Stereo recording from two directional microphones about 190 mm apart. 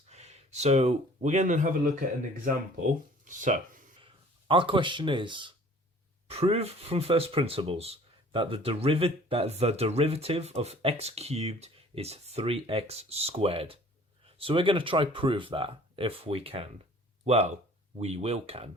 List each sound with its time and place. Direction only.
0.1 s speech: 35° right (ahead or behind)
4.0 s speech: 25° right (ahead or behind)